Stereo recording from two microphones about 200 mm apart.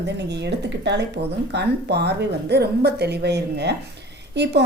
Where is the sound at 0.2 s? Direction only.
60° right (ahead or behind).